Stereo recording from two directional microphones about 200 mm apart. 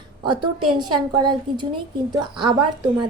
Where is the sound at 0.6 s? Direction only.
90° right.